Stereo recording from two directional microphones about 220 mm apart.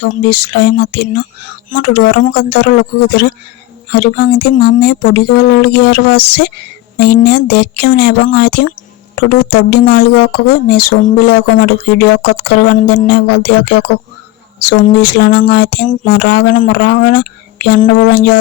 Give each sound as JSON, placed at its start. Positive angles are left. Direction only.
{"t": 0.3, "sound": "speech", "side_deg": 45}